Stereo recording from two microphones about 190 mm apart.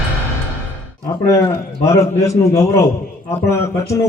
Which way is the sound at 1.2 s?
15° left (ahead or behind).